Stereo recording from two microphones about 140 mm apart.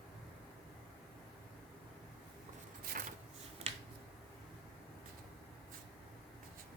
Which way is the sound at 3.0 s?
80° right.